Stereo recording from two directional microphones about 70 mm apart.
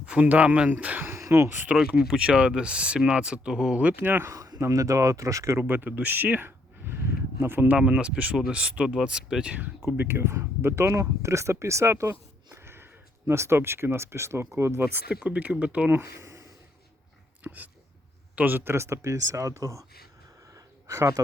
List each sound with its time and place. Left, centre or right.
0.0 s speech: centre
1.0 s a sound: right
2.0 s speech: centre; by 4.3 s right
4.3 s a sound: right
4.6 s speech: right
5.5 s speech: right
7.8 s speech: centre
10.0 s speech: right
15.1 s speech: centre
16.0 s speech: right
17.4 s a sound: right
18.3 s speech: right
20.5 s a sound: right